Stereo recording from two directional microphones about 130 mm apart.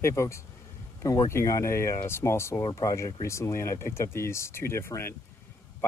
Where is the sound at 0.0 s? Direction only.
20° left (ahead or behind).